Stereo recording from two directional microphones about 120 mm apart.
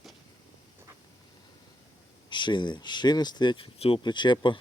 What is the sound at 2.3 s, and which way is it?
Speech, 40° left (ahead or behind).